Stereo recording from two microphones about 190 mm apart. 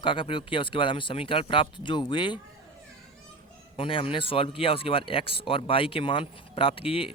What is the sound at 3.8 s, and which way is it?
Speech, 30° left (ahead or behind).